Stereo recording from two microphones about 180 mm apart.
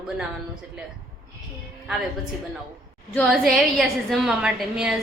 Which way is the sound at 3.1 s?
Centre (ahead or behind).